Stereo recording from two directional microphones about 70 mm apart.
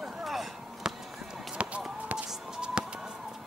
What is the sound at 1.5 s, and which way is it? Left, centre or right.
Run, centre.